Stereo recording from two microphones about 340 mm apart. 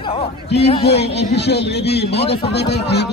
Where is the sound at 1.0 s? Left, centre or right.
Left.